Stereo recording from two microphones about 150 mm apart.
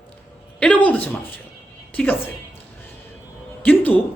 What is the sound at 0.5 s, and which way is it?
A man's voice, 10° left (ahead or behind).